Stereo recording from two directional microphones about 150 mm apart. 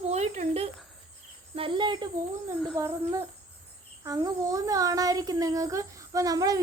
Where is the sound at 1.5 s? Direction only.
35° right (ahead or behind).